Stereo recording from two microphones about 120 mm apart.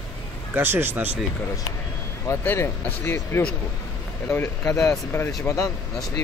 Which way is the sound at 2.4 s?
20° left (ahead or behind).